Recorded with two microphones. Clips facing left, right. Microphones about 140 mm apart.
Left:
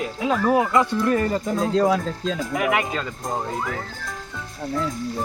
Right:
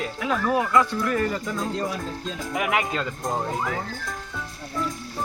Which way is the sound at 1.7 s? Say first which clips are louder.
Left 9 dB; 90° left.